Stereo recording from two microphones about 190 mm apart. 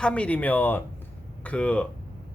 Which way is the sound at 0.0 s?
5° left (ahead or behind).